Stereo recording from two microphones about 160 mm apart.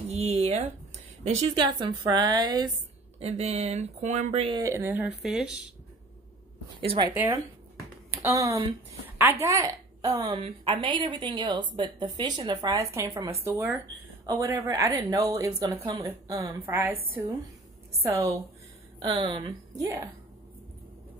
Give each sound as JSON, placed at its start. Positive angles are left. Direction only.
{"t": 0.1, "sound": "a sound", "side_deg": -40}
{"t": 1.5, "sound": "a woman's voice", "side_deg": -30}
{"t": 3.2, "sound": "speech", "side_deg": -40}
{"t": 4.6, "sound": "a woman's voice", "side_deg": -20}
{"t": 6.8, "sound": "speech", "side_deg": -35}
{"t": 7.1, "sound": "a woman's voice", "side_deg": -15}
{"t": 18.0, "sound": "a woman's voice", "side_deg": -20}
{"t": 18.9, "sound": "a woman's voice", "side_deg": -30}